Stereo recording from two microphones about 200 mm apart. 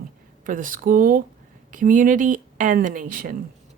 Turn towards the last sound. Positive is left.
turn(degrees=-45)  # may be behind; listen again after turning